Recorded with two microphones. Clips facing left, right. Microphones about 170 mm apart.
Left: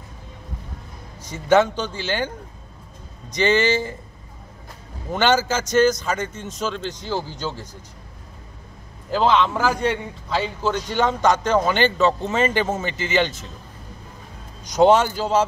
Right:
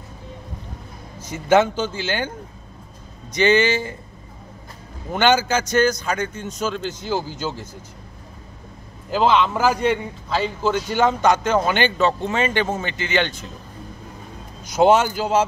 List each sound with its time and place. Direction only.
1.5 s speech: 5° right (ahead or behind)
5.1 s speech: centre (ahead or behind)
9.1 s speech: 5° right (ahead or behind)
14.6 s speech: 5° right (ahead or behind)